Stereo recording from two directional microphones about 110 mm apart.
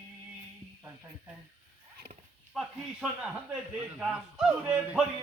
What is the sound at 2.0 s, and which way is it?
Horse, 55° right (ahead or behind).